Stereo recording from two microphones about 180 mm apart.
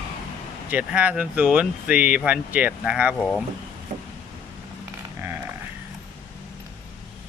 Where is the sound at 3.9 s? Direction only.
35° right (ahead or behind).